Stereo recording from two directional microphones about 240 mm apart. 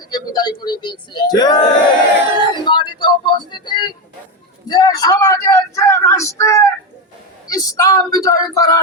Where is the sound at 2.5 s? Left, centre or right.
Centre.